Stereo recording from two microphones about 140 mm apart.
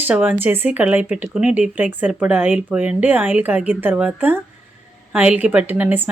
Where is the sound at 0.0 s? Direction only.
10° right (ahead or behind).